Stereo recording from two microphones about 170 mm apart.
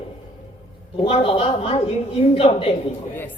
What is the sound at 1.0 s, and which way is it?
A man's voice, 35° left (ahead or behind).